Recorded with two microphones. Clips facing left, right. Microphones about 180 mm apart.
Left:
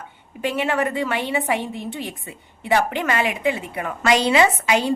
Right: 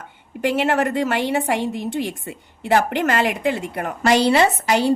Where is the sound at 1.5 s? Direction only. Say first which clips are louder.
Right 4 dB; 85° right.